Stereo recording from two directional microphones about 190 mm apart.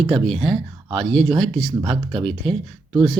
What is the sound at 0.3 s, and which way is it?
Speech, centre (ahead or behind).